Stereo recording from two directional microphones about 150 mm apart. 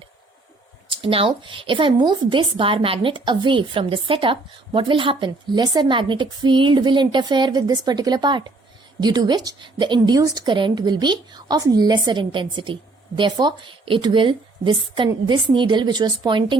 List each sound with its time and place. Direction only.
0.9 s a woman's voice: 35° right (ahead or behind)